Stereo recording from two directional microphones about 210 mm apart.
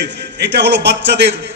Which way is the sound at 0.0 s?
55° right (ahead or behind).